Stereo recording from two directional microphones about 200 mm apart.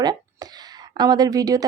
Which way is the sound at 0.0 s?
20° right (ahead or behind).